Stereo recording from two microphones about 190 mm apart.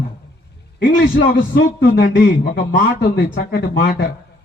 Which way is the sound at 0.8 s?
55° left (ahead or behind).